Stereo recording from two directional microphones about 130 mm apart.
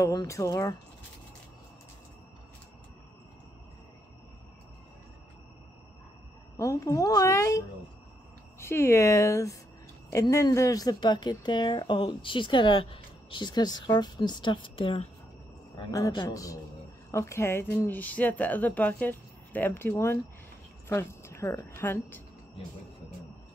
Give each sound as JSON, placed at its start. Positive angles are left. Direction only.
{"t": 0.0, "sound": "speech", "side_deg": 25}
{"t": 6.5, "sound": "speech", "side_deg": 25}